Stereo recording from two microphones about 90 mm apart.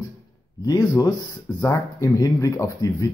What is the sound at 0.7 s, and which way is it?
Speech, 45° left (ahead or behind).